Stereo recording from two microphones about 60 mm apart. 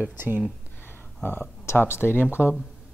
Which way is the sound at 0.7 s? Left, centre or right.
Left.